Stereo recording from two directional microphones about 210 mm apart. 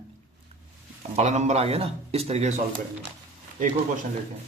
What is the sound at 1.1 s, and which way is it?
A man's voice, 35° right (ahead or behind).